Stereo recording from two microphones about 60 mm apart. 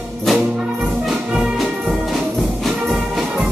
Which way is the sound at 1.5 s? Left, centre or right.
Centre.